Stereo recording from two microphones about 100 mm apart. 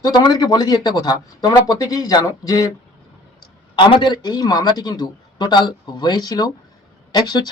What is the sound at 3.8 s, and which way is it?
Speech, 55° left (ahead or behind).